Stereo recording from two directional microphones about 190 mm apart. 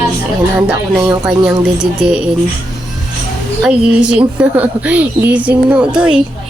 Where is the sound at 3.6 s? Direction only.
5° right (ahead or behind).